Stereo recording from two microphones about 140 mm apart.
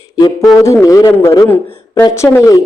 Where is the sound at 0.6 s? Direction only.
20° left (ahead or behind).